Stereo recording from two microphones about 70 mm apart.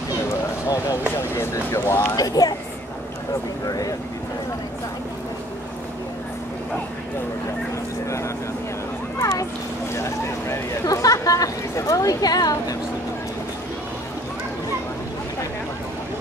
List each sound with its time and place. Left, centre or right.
0.7 s speech: left
1.5 s speech: left
2.1 s a woman's voice: left
3.6 s a woman's voice: left
9.2 s a sound: left
9.9 s vehicle: left
10.9 s a woman's voice: left